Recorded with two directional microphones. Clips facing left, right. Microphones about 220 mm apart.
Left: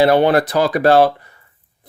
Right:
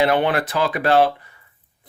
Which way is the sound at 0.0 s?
35° left (ahead or behind).